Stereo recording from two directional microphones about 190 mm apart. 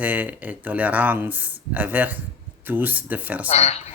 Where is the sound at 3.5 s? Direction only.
35° left (ahead or behind).